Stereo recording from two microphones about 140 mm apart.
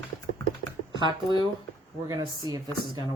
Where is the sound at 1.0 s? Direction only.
35° right (ahead or behind).